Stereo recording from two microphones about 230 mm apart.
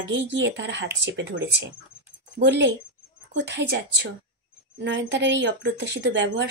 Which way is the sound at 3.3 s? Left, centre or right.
Right.